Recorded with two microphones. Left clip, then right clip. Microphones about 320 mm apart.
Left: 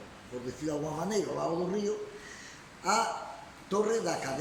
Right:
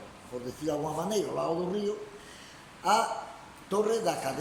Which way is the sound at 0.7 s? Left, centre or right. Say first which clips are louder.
Right 3 dB; centre.